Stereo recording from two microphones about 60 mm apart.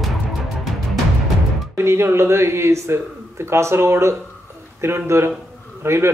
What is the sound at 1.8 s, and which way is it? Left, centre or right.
Speech, right.